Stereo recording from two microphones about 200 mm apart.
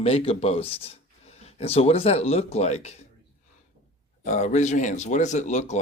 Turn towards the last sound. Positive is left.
turn(degrees=35)  # may be behind; listen again after turning